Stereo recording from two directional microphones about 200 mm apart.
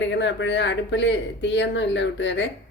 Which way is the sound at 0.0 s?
65° left (ahead or behind).